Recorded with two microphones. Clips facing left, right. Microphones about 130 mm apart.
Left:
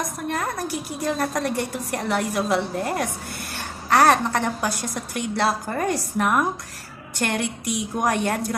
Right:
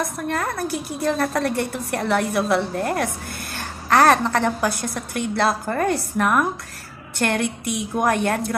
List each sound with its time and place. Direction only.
0.3 s a woman's voice: 15° left (ahead or behind)